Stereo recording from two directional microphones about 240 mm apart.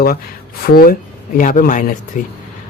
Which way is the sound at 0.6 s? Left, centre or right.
Left.